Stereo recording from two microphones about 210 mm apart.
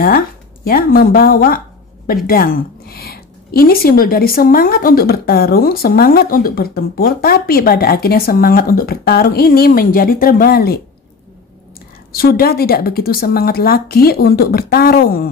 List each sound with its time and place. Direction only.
0.7 s speech: 45° left (ahead or behind)
12.1 s speech: 45° left (ahead or behind)